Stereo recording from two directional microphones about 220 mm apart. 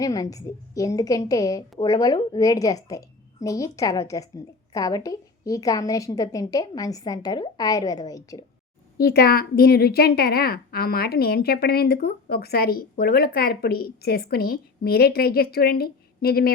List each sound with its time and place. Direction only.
0.0 s a woman's voice: 15° left (ahead or behind)
9.0 s a woman's voice: 45° left (ahead or behind)